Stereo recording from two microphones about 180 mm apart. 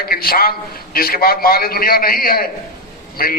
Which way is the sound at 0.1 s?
55° left (ahead or behind).